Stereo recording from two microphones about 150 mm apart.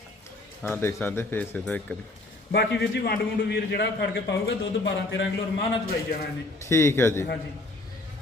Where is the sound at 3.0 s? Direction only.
90° left.